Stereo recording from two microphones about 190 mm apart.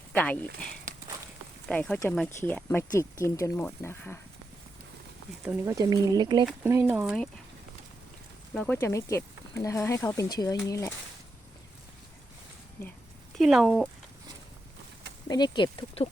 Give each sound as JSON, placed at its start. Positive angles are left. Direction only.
{"t": 0.1, "sound": "speech", "side_deg": 10}
{"t": 1.6, "sound": "speech", "side_deg": 5}
{"t": 5.5, "sound": "speech", "side_deg": -15}
{"t": 6.4, "sound": "speech", "side_deg": -10}
{"t": 8.5, "sound": "speech", "side_deg": 5}
{"t": 13.4, "sound": "speech", "side_deg": 0}
{"t": 15.3, "sound": "speech", "side_deg": 20}